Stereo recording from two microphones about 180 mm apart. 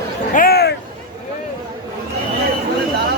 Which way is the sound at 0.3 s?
60° left (ahead or behind).